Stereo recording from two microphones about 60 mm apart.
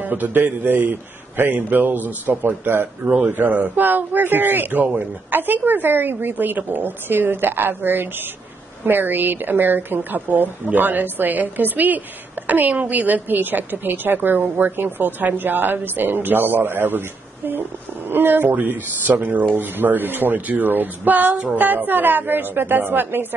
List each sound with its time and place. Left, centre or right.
0.0 s speech: right
18.1 s speech: right